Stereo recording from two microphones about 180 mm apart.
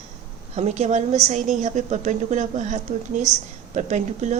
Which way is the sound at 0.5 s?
40° right (ahead or behind).